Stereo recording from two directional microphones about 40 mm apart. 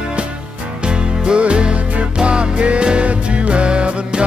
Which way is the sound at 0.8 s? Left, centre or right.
Right.